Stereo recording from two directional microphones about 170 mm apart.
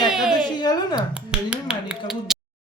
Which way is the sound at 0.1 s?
Centre (ahead or behind).